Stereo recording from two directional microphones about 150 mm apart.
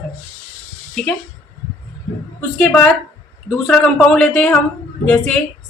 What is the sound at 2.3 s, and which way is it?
A woman's voice, 10° left (ahead or behind).